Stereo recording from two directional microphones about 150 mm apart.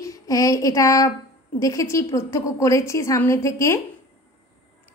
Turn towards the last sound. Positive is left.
turn(degrees=20)  # may be behind; listen again after turning